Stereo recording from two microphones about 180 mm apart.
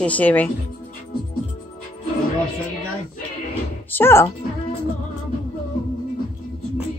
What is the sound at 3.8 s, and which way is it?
Speech, 10° left (ahead or behind).